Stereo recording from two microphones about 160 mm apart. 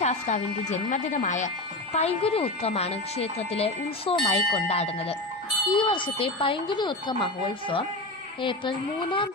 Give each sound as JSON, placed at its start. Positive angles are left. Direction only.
{"t": 0.0, "sound": "a woman's voice", "side_deg": 45}
{"t": 4.7, "sound": "a woman's voice", "side_deg": 40}
{"t": 8.4, "sound": "a woman's voice", "side_deg": 30}